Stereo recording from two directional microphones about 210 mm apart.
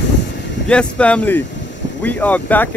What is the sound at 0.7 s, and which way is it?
Speech, 5° left (ahead or behind).